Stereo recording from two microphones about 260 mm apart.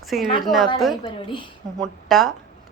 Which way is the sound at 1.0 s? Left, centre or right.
Centre.